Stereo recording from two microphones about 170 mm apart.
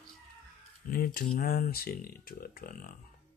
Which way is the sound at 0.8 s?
60° left (ahead or behind).